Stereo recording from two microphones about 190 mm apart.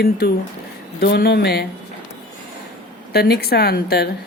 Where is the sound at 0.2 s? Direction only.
60° left (ahead or behind).